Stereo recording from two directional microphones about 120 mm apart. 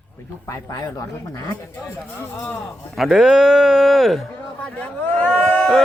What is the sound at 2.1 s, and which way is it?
Speech, 15° left (ahead or behind).